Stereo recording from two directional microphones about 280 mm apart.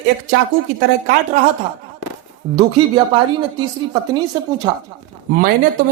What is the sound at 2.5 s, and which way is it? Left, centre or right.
Speech, centre.